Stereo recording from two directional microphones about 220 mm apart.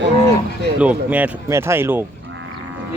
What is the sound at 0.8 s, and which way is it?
Speech, 5° right (ahead or behind).